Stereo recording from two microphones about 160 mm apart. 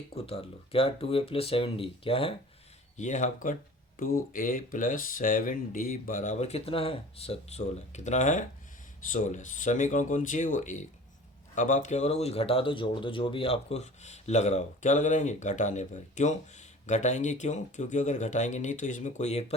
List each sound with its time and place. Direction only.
0.1 s speech: 35° left (ahead or behind)
3.0 s speech: 50° left (ahead or behind)